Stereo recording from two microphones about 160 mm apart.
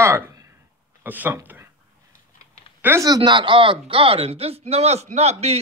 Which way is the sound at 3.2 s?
30° right (ahead or behind).